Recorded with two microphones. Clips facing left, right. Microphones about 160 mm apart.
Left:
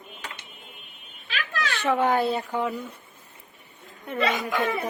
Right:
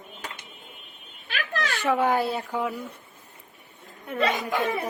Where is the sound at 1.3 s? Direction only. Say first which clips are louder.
Right 1 dB; 45° right (ahead or behind).